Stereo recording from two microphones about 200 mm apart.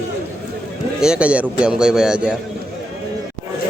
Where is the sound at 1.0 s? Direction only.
5° right (ahead or behind).